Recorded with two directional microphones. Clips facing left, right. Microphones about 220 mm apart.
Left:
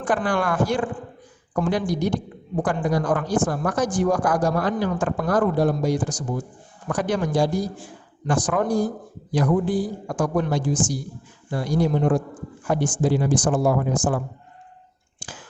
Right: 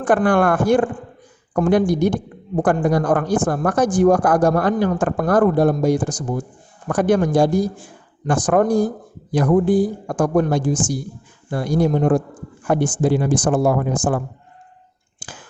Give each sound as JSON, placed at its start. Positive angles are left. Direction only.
{"t": 0.0, "sound": "speech", "side_deg": -50}